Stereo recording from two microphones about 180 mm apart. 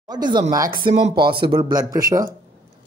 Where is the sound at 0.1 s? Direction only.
25° right (ahead or behind).